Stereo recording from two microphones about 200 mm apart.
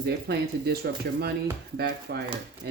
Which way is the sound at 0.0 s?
55° right (ahead or behind).